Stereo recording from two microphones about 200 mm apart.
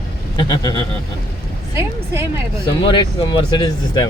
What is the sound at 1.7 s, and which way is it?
Speech, 15° right (ahead or behind).